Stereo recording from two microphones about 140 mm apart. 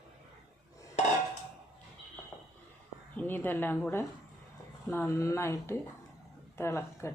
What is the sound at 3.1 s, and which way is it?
Speech, 15° left (ahead or behind).